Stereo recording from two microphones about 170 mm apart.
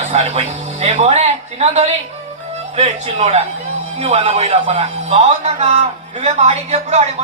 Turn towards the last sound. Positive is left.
turn(degrees=-40)  # may be behind; listen again after turning